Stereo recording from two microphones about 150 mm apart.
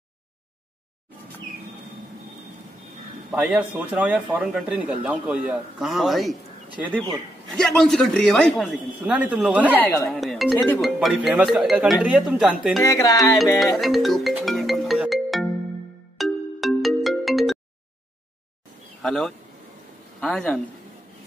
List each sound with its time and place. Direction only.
3.3 s speech: 10° right (ahead or behind)
7.5 s speech: 5° left (ahead or behind)
9.8 s speech: 15° left (ahead or behind)
10.1 s speech: centre (ahead or behind)
12.8 s speech: 20° left (ahead or behind)
13.7 s speech: centre (ahead or behind)
14.4 s music: centre (ahead or behind)
16.2 s ringtone: centre (ahead or behind)
19.0 s speech: 5° left (ahead or behind)